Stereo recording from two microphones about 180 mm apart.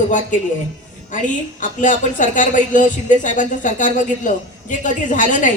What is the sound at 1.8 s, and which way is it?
Speech, 45° left (ahead or behind).